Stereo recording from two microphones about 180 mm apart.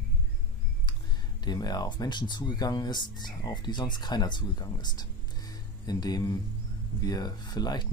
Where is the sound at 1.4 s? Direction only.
25° left (ahead or behind).